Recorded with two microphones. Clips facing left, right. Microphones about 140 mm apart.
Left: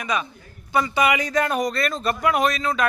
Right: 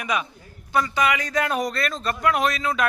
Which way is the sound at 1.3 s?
Centre (ahead or behind).